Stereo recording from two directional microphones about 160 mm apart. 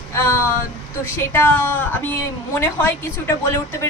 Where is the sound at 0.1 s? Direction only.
15° left (ahead or behind).